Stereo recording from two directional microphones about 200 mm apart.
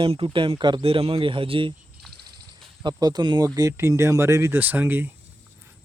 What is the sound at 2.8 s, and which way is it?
Speech, 20° right (ahead or behind).